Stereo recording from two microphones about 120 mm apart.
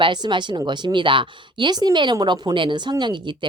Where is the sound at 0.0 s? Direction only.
40° right (ahead or behind).